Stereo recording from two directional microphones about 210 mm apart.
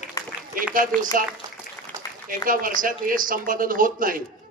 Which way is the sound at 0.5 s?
40° right (ahead or behind).